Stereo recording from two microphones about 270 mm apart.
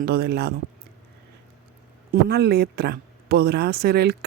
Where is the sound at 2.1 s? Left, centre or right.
Right.